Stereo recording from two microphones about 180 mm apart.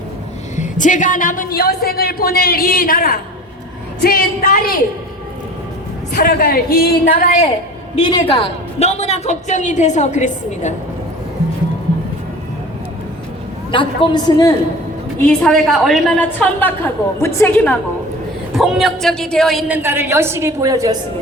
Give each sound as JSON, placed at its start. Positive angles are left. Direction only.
{"t": 0.5, "sound": "a woman's voice", "side_deg": 45}
{"t": 6.1, "sound": "speech", "side_deg": 55}
{"t": 8.0, "sound": "a woman's voice", "side_deg": 30}
{"t": 13.7, "sound": "a man's voice", "side_deg": 25}
{"t": 15.3, "sound": "a woman's voice", "side_deg": 5}
{"t": 19.6, "sound": "a woman's voice", "side_deg": -10}